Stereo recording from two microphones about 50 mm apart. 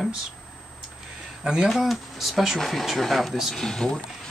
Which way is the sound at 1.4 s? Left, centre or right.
Centre.